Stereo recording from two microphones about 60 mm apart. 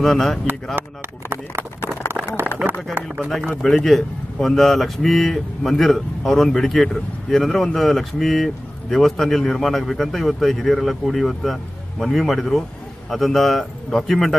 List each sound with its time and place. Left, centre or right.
0.0 s a man's voice: centre
1.3 s speech: right
2.6 s speech: right
3.3 s a man's voice: centre